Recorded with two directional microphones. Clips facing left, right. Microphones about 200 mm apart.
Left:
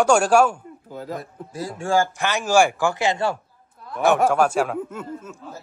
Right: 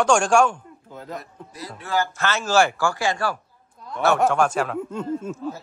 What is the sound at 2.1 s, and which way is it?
Speech, 15° left (ahead or behind).